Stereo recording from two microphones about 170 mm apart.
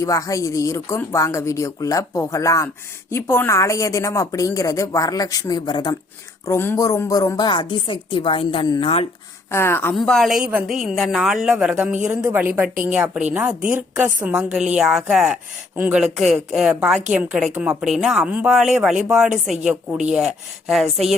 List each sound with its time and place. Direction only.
0.0 s a woman's voice: 20° left (ahead or behind)
6.5 s a woman's voice: 15° left (ahead or behind); by 9.0 s 35° left (ahead or behind)
9.5 s speech: 15° left (ahead or behind)
10.0 s a woman's voice: centre (ahead or behind)